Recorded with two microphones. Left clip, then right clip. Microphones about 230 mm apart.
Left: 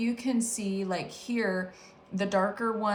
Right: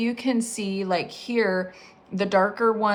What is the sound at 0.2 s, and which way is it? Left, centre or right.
A woman's voice, right.